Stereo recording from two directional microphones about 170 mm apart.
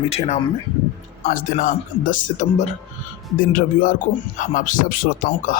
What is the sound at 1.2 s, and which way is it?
Speech, 55° left (ahead or behind).